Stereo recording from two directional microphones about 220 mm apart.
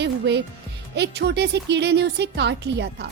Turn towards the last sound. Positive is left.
turn(degrees=-50)  # may be behind; listen again after turning